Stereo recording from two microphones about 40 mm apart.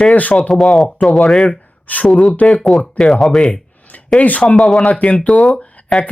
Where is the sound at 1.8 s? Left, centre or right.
Left.